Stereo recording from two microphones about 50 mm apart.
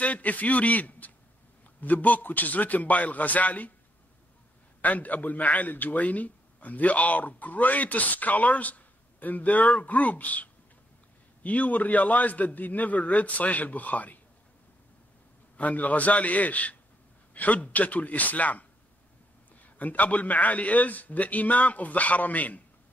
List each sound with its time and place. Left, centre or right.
0.0 s a man's voice: left
4.8 s a man's voice: left
15.5 s a man's voice: left